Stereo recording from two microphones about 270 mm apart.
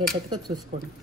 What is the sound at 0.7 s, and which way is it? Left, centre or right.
Speech, right.